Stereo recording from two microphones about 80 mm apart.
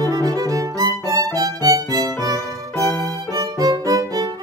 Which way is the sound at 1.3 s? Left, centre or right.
Right.